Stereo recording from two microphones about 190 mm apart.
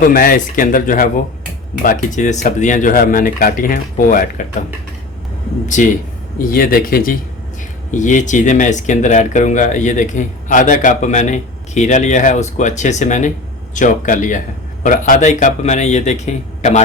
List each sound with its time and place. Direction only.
0.0 s speech: 50° left (ahead or behind)
5.6 s speech: 40° left (ahead or behind)
6.5 s speech: 50° left (ahead or behind)